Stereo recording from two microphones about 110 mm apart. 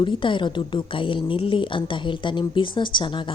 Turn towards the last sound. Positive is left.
turn(degrees=45)  # may be behind; listen again after turning